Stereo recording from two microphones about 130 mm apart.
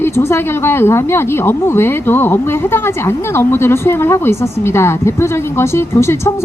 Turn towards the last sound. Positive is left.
turn(degrees=20)  # may be behind; listen again after turning